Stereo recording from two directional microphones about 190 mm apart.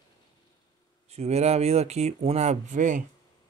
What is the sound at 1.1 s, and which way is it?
Speech, 35° right (ahead or behind).